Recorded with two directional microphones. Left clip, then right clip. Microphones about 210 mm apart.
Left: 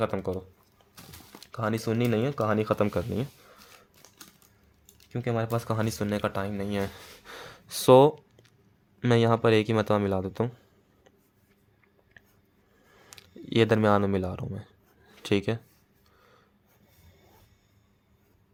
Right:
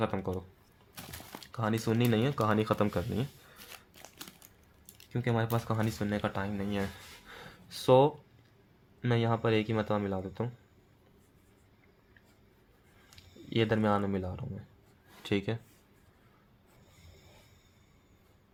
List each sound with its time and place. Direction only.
0.0 s speech: 35° left (ahead or behind)
1.4 s speech: 30° left (ahead or behind)
4.0 s a sound: 25° right (ahead or behind)
5.1 s speech: 30° left (ahead or behind); by 10.5 s 50° left (ahead or behind)
13.1 s speech: 55° left (ahead or behind)